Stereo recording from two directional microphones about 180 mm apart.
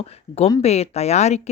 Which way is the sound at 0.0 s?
35° left (ahead or behind).